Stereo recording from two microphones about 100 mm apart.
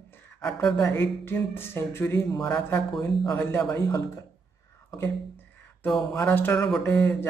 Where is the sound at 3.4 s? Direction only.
20° left (ahead or behind).